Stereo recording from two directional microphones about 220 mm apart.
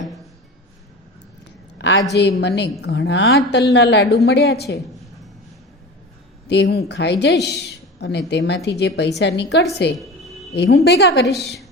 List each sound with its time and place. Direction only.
1.8 s a woman's voice: 55° left (ahead or behind)
6.5 s speech: 50° left (ahead or behind)